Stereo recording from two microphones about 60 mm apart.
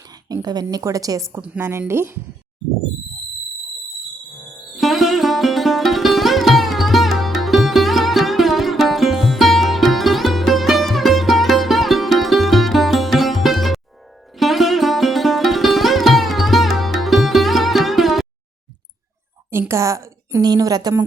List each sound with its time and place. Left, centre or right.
0.4 s a woman's voice: right
1.5 s speech: right
4.4 s music: centre
14.3 s sitar: centre
19.5 s a sound: right
20.5 s a woman's voice: right